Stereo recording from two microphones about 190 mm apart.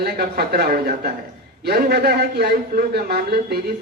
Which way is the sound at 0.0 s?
55° right (ahead or behind).